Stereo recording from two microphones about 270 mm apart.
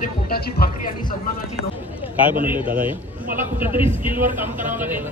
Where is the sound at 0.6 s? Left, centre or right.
Left.